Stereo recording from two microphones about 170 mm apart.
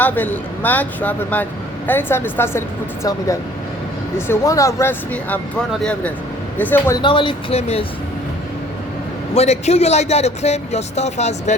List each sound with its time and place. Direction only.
0.0 s speech: 10° left (ahead or behind)
7.0 s speech: 30° left (ahead or behind)
9.3 s a man's voice: 40° left (ahead or behind)